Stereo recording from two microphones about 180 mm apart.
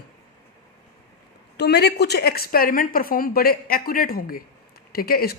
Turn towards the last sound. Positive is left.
turn(degrees=55)  # may be behind; listen again after turning